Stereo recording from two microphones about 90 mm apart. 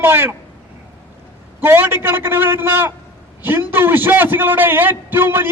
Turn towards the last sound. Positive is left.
turn(degrees=-25)  # may be behind; listen again after turning